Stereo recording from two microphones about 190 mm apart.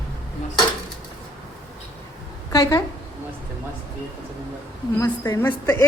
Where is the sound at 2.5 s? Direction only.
20° left (ahead or behind).